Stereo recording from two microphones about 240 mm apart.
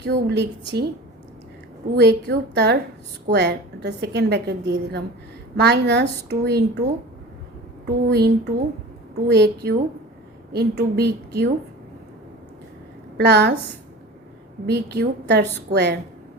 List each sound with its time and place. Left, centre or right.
0.0 s a woman's voice: right
2.0 s a woman's voice: right
7.9 s a woman's voice: right
13.1 s a woman's voice: right
14.7 s a woman's voice: right